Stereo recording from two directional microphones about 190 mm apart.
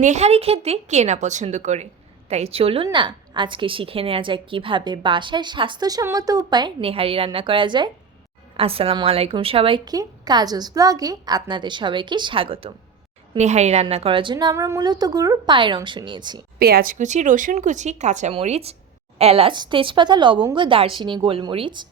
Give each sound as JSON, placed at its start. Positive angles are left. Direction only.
{"t": 0.0, "sound": "a woman's voice", "side_deg": -35}
{"t": 16.6, "sound": "a woman's voice", "side_deg": -55}